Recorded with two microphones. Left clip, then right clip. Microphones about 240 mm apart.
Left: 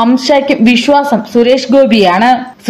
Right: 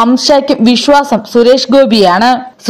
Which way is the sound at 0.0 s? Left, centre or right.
Right.